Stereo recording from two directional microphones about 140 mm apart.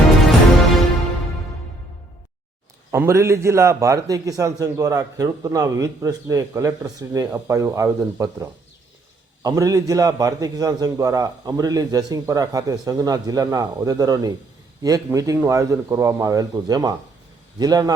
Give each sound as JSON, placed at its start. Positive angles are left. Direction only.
{"t": 2.9, "sound": "a man's voice", "side_deg": -20}